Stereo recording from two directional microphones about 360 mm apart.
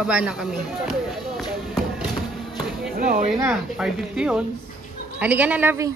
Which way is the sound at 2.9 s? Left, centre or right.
Right.